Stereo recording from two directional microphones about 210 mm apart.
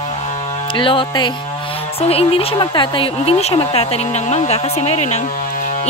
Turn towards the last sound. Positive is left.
turn(degrees=30)  # may be behind; listen again after turning